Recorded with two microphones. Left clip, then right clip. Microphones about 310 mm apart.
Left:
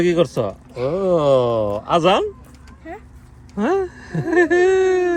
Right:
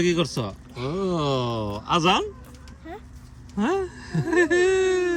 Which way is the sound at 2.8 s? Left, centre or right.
Centre.